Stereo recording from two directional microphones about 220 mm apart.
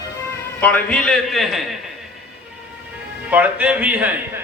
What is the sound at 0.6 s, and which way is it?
A man's voice, 5° left (ahead or behind).